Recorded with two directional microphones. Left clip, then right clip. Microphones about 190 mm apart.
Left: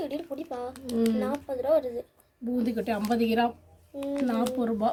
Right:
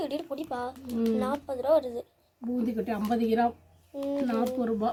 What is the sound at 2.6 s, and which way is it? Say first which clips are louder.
Speech: left 2 dB; 45° left (ahead or behind).